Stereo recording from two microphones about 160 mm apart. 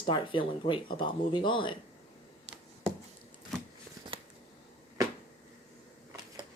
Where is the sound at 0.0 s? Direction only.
30° left (ahead or behind).